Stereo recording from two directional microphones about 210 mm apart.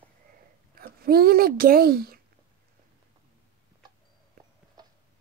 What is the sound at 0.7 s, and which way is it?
Speech, 45° right (ahead or behind).